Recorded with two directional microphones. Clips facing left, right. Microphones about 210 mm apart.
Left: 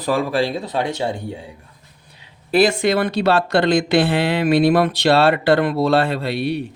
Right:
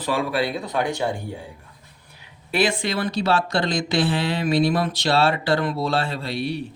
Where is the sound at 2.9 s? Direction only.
60° left (ahead or behind).